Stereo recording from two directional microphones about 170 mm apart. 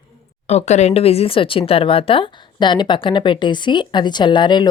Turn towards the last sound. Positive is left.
turn(degrees=25)  # may be behind; listen again after turning